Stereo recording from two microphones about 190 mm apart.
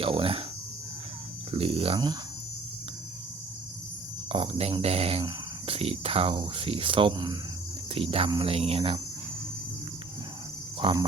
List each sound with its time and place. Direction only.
0.0 s speech: 30° right (ahead or behind)
1.5 s cricket: 30° right (ahead or behind)
4.3 s speech: 30° right (ahead or behind)
7.9 s cricket: 30° right (ahead or behind)
10.8 s cricket: 25° right (ahead or behind)